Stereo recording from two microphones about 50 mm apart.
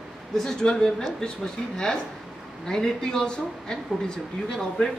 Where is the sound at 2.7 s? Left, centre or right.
Centre.